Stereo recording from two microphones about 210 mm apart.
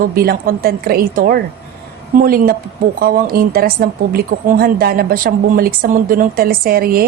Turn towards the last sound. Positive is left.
turn(degrees=-45)  # may be behind; listen again after turning